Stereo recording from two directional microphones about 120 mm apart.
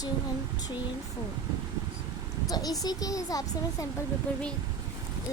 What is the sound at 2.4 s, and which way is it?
Speech, 30° left (ahead or behind).